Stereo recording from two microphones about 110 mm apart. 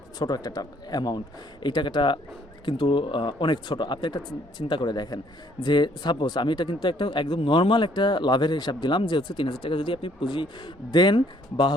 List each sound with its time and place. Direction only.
0.2 s a man's voice: 35° left (ahead or behind)